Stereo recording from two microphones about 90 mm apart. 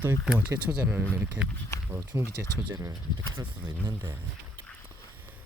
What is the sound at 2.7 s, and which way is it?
Speech, 45° right (ahead or behind).